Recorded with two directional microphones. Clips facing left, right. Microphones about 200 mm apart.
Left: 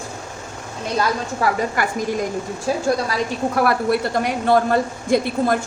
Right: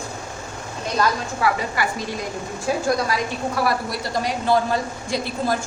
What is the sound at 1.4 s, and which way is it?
Speech, 50° left (ahead or behind).